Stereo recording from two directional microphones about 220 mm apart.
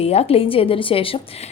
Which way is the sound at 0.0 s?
25° left (ahead or behind).